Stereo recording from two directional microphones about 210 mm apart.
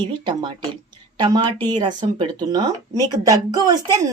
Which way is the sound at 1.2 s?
20° right (ahead or behind).